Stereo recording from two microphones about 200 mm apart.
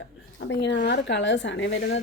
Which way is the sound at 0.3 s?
60° left (ahead or behind).